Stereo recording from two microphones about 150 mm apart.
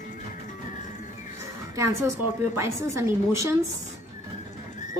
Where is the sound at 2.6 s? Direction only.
20° right (ahead or behind).